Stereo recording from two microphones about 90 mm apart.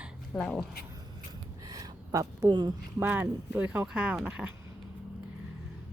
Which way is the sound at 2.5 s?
55° right (ahead or behind).